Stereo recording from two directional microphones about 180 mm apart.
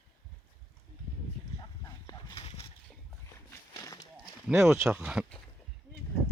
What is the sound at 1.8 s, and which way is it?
Dog, 20° left (ahead or behind).